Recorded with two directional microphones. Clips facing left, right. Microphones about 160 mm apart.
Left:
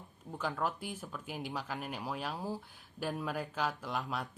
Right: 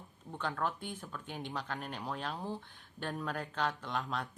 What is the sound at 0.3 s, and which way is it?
Speech, 5° left (ahead or behind).